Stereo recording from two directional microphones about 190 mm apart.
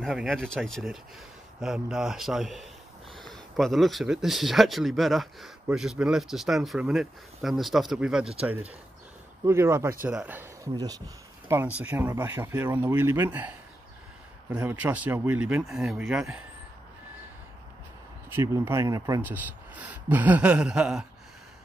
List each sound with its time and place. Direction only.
0.0 s a man's voice: centre (ahead or behind); by 11.0 s 20° right (ahead or behind)
11.4 s speech: 10° right (ahead or behind)
18.3 s speech: 15° right (ahead or behind)